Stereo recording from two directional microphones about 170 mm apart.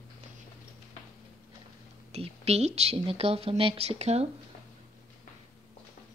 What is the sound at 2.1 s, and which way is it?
Speech, 40° right (ahead or behind).